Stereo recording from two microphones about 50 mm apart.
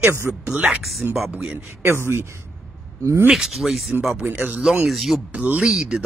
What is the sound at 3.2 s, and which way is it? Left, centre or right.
Speech, centre.